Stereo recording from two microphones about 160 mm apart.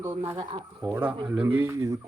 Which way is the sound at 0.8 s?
10° right (ahead or behind).